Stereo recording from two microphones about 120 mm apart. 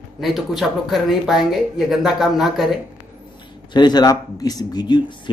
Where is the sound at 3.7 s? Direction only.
35° left (ahead or behind).